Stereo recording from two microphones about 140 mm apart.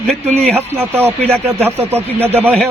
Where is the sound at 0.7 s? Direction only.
15° right (ahead or behind).